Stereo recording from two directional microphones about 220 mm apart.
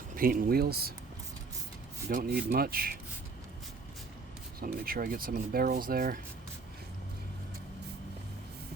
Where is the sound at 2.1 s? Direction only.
45° right (ahead or behind).